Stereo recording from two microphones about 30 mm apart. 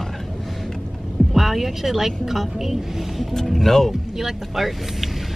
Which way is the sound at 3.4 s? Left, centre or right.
Centre.